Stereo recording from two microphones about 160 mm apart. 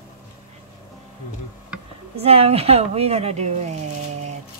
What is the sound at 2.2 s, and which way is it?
Speech, 40° right (ahead or behind).